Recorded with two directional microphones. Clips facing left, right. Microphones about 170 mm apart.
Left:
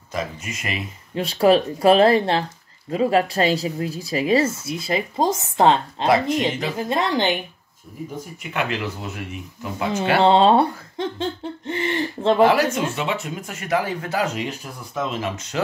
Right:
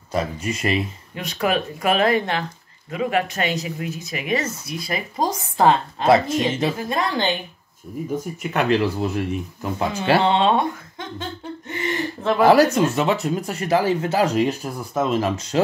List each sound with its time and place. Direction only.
0.1 s speech: 35° right (ahead or behind)
1.1 s speech: 30° left (ahead or behind)
6.0 s speech: 25° right (ahead or behind)
6.8 s speech: 20° left (ahead or behind)
8.4 s speech: 40° right (ahead or behind)
10.2 s speech: 35° left (ahead or behind)
12.7 s speech: 40° right (ahead or behind)